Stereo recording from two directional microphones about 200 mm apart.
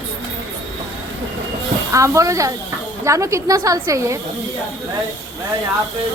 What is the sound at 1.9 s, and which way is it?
A woman's voice, 15° right (ahead or behind).